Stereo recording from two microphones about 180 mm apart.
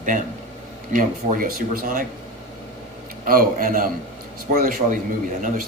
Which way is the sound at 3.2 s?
50° right (ahead or behind).